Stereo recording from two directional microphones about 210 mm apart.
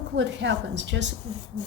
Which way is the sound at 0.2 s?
55° right (ahead or behind).